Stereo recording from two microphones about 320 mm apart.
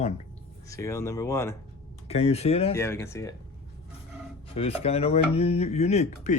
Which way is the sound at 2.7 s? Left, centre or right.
Centre.